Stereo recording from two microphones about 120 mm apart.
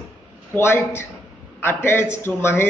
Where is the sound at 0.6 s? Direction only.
20° left (ahead or behind).